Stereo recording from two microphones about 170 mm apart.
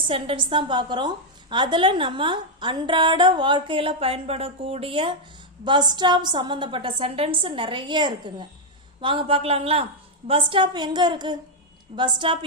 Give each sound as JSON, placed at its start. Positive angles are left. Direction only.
{"t": 0.1, "sound": "a woman's voice", "side_deg": -30}